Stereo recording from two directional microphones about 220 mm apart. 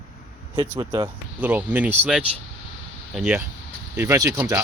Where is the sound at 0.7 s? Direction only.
20° right (ahead or behind).